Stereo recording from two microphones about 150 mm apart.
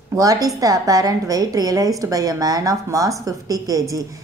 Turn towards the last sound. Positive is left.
turn(degrees=-25)  # may be behind; listen again after turning